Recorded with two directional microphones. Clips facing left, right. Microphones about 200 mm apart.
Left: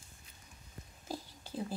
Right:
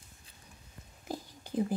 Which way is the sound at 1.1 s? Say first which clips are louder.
Right 4 dB; 15° right (ahead or behind).